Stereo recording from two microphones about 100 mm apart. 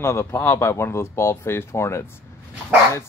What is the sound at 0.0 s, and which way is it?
Speech, 25° left (ahead or behind).